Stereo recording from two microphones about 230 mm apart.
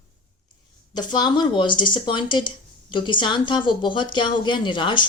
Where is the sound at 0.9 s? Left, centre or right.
Centre.